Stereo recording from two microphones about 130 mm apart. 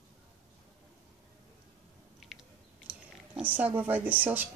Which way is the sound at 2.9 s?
10° right (ahead or behind).